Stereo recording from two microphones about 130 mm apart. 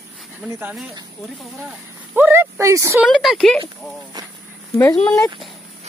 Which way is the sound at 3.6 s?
30° right (ahead or behind).